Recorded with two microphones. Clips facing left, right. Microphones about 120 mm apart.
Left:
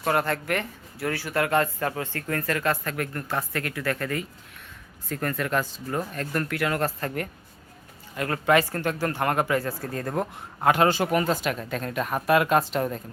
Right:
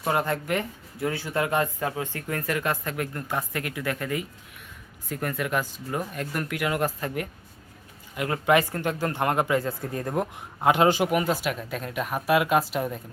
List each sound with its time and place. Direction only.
0.0 s speech: 20° right (ahead or behind)